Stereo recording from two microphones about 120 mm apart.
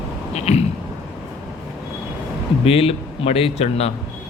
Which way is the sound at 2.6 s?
55° left (ahead or behind).